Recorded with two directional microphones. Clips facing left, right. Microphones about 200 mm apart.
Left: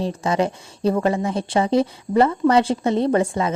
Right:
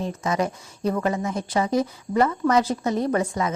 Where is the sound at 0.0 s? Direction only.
30° left (ahead or behind).